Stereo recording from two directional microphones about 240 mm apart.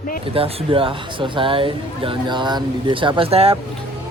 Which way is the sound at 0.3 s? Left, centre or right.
Right.